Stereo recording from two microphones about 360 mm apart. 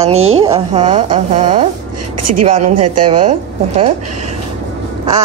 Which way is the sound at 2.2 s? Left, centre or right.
Right.